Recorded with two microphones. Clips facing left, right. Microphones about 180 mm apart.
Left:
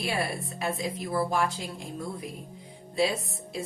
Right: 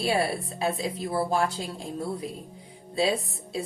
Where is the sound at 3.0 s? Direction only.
30° right (ahead or behind).